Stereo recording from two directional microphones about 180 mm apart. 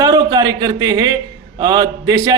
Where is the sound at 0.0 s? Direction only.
20° right (ahead or behind).